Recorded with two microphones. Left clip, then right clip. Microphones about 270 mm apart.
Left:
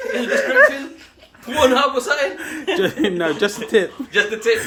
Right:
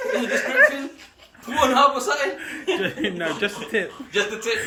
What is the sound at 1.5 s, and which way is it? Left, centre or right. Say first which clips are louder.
Speech: left 2 dB; centre.